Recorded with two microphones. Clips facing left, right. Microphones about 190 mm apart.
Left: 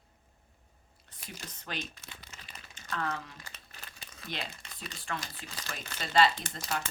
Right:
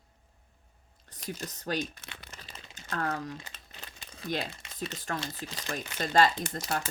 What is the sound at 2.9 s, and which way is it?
Speech, 45° right (ahead or behind).